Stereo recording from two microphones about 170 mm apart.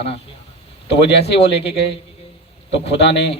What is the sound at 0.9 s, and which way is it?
Speech, 80° left.